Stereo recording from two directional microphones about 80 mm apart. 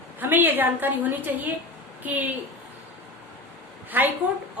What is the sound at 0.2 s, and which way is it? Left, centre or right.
A woman's voice, right.